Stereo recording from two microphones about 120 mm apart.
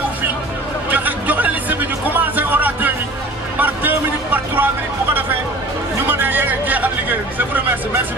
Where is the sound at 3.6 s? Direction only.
15° right (ahead or behind).